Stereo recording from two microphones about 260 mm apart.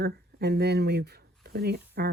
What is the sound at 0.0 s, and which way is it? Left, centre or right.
Speech, right.